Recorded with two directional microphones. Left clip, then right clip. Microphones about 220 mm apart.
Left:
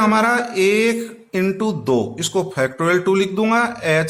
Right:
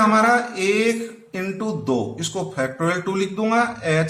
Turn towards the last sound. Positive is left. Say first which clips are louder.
# left 3 dB
turn(degrees=45)  # may be behind; listen again after turning